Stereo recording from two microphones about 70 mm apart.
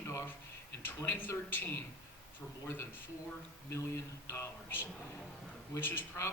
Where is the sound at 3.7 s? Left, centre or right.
Left.